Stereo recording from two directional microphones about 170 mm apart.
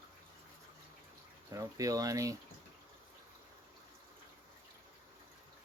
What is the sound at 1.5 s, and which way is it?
Speech, 20° right (ahead or behind).